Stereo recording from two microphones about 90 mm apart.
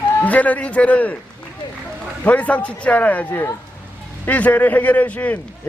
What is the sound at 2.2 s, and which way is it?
A man's voice, 15° left (ahead or behind).